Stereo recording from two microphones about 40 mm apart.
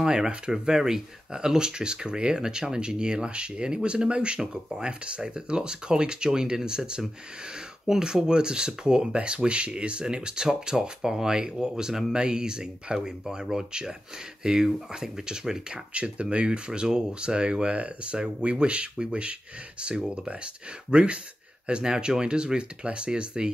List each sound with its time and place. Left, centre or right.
0.1 s speech: right
0.5 s speech: centre
8.0 s speech: right
15.9 s speech: right
17.7 s speech: right